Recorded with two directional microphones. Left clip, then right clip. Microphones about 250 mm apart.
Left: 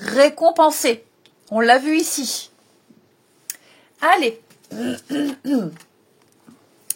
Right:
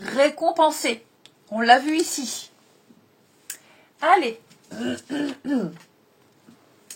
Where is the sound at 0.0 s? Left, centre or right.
Left.